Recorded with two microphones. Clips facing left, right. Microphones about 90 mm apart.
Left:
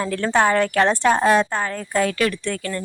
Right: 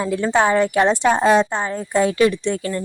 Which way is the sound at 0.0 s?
15° right (ahead or behind).